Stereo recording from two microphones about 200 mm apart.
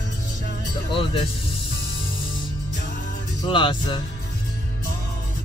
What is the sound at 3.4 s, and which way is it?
Speech, 25° left (ahead or behind).